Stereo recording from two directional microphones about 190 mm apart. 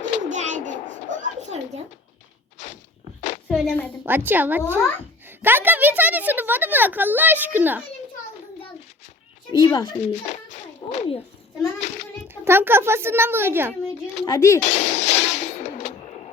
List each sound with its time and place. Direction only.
0.3 s a sound: 40° right (ahead or behind)
3.5 s a child's voice: 5° right (ahead or behind)
9.5 s speech: 20° left (ahead or behind)
10.0 s pigeon: 40° left (ahead or behind)
11.8 s a child's voice: 35° left (ahead or behind)
12.3 s a woman's voice: 10° right (ahead or behind)
14.3 s speech: 15° left (ahead or behind)
14.6 s music: 40° left (ahead or behind)